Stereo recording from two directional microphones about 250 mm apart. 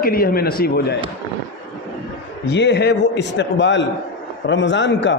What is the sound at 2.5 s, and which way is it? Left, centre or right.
A man's voice, left.